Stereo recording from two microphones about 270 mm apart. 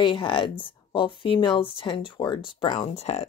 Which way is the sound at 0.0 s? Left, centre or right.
Centre.